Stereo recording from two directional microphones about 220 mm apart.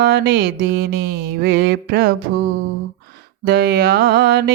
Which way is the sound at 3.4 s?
45° right (ahead or behind).